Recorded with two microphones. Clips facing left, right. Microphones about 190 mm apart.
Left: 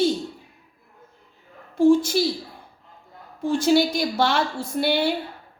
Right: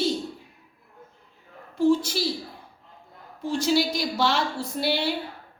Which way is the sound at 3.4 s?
50° left (ahead or behind).